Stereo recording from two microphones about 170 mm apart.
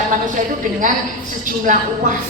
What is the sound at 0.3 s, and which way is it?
A woman's voice, 50° right (ahead or behind).